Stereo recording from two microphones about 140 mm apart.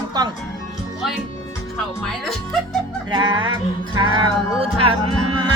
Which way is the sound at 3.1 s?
35° right (ahead or behind).